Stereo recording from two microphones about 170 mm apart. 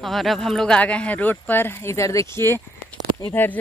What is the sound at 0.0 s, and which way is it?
Speech, centre (ahead or behind).